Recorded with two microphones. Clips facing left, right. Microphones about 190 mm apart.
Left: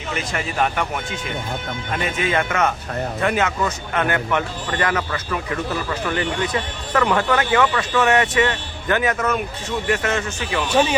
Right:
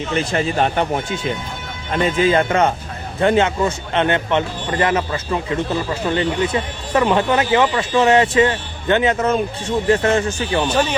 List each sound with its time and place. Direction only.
0.1 s a man's voice: 30° right (ahead or behind)